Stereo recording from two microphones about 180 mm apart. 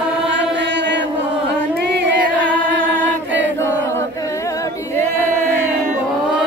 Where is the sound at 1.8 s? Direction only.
70° right (ahead or behind).